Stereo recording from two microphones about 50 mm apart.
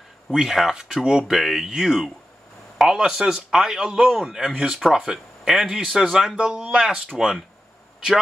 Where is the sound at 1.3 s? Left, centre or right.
Centre.